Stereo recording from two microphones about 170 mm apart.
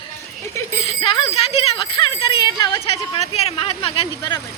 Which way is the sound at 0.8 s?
35° left (ahead or behind).